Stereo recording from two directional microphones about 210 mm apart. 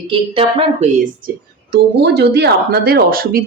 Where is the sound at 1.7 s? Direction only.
50° right (ahead or behind).